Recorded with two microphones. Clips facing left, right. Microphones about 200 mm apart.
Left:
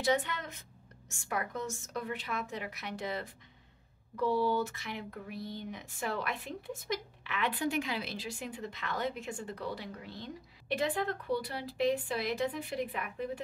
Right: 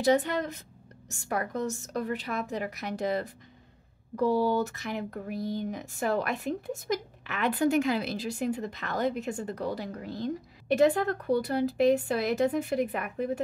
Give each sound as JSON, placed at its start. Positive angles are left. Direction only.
{"t": 0.0, "sound": "a woman's voice", "side_deg": -40}